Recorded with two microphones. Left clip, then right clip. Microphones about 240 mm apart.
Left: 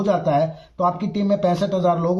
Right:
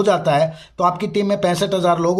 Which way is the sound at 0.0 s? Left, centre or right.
Right.